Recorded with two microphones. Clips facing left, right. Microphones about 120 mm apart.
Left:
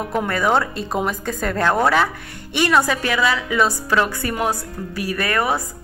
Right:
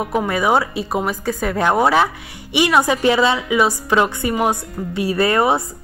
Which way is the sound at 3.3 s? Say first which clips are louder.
Right 2 dB; 15° right (ahead or behind).